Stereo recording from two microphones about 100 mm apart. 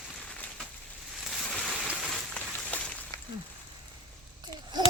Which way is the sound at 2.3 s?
10° left (ahead or behind).